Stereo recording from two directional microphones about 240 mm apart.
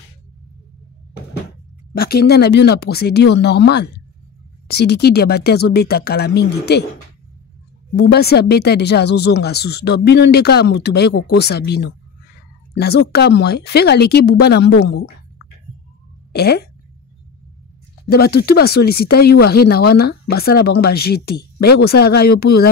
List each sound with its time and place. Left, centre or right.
2.0 s speech: left
7.9 s speech: left
16.3 s speech: left
18.1 s speech: left